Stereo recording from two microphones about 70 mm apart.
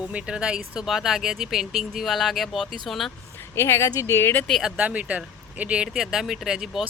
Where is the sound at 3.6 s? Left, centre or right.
Left.